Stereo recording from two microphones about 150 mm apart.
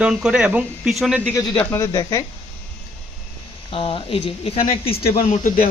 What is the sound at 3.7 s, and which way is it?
Speech, 35° left (ahead or behind).